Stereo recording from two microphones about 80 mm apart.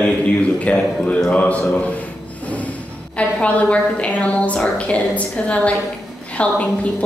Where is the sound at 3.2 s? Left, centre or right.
Centre.